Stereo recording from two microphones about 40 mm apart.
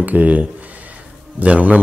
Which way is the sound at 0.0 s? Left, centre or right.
Right.